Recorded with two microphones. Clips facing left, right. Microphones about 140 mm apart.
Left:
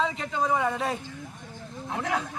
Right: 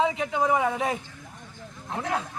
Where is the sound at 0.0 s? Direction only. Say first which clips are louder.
Right 3 dB; 15° right (ahead or behind).